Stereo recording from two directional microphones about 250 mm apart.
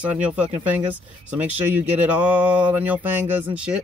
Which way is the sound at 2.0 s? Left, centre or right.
Centre.